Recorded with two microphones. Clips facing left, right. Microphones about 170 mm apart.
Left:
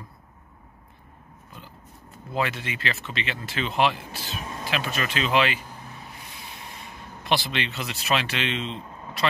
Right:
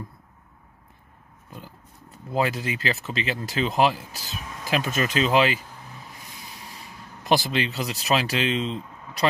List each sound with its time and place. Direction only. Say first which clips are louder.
1.5 s speech: right 4 dB; 40° right (ahead or behind)
6.5 s a sound: left 1 dB; 40° right (ahead or behind)
7.2 s speech: right 4 dB; 45° right (ahead or behind)